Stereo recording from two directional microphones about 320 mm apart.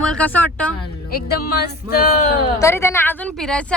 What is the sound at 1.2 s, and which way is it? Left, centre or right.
Speech, left.